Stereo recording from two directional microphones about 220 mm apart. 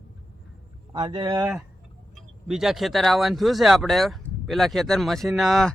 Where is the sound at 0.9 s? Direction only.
20° right (ahead or behind).